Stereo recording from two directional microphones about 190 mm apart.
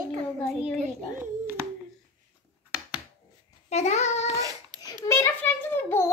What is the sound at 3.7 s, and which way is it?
Speech, 35° left (ahead or behind).